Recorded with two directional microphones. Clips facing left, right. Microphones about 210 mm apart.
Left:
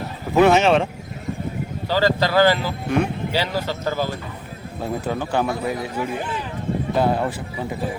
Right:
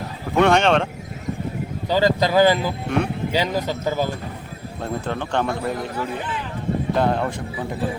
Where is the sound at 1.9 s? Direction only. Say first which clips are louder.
Right 1 dB; 20° right (ahead or behind).